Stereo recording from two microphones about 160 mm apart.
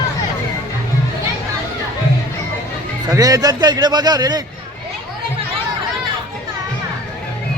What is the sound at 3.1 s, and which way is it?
A man's voice, 20° right (ahead or behind).